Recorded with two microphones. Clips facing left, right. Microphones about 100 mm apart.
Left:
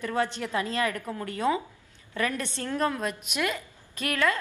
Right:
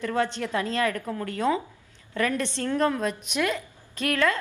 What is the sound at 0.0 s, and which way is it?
A woman's voice, 15° left (ahead or behind).